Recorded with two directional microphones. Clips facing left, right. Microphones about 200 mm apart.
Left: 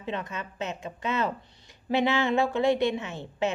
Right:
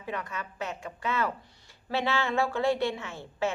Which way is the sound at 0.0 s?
25° left (ahead or behind).